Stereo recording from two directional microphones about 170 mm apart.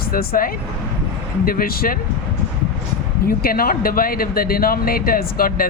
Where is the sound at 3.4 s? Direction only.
60° left (ahead or behind).